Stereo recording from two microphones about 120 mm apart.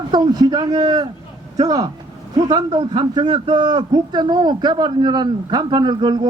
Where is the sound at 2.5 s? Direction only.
40° right (ahead or behind).